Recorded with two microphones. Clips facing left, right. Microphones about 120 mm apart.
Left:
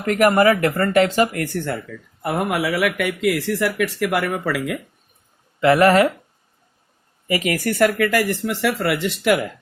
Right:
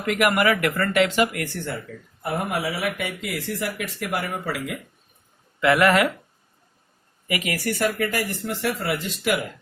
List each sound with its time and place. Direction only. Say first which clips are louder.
0.0 s speech: left 5 dB; 40° left (ahead or behind)
2.2 s speech: left 4 dB; 80° left
5.5 s speech: left 4 dB; 30° left (ahead or behind)
7.3 s speech: left 6 dB; 35° left (ahead or behind)
7.5 s speech: left 6 dB; 55° left (ahead or behind); by 9.3 s 75° left (ahead or behind)